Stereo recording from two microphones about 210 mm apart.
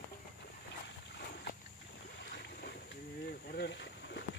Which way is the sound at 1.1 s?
50° left (ahead or behind).